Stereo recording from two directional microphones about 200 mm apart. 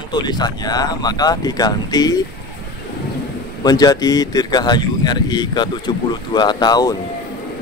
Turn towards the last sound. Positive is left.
turn(degrees=20)  # may be behind; listen again after turning